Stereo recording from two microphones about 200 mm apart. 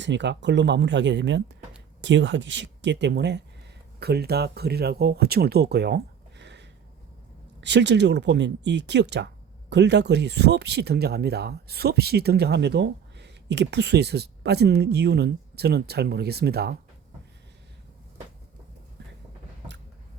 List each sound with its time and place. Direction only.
0.0 s speech: 60° right (ahead or behind)